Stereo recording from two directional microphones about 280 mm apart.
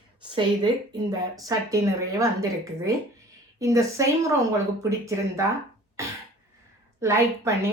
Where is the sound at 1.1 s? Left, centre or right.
Centre.